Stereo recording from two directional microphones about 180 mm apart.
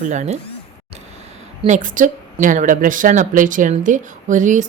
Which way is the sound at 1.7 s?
45° right (ahead or behind).